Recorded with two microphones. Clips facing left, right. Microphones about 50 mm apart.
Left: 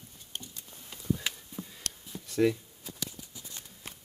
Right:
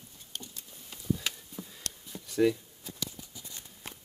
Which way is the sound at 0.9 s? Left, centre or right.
Centre.